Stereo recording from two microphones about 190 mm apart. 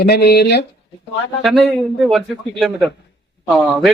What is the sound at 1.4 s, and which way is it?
Speech, centre (ahead or behind).